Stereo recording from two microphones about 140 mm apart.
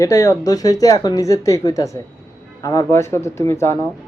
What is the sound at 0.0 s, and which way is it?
Speech, 20° left (ahead or behind).